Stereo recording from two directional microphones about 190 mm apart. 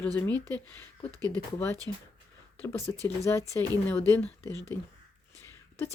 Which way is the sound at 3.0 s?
15° left (ahead or behind).